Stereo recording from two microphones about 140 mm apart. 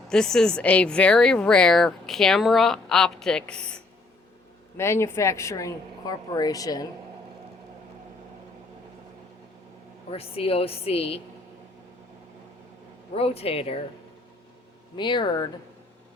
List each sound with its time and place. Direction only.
0.1 s speech: 5° left (ahead or behind)
4.8 s a woman's voice: 20° left (ahead or behind)
10.1 s a woman's voice: 45° left (ahead or behind)
13.1 s a woman's voice: 45° left (ahead or behind)
14.9 s speech: 35° left (ahead or behind)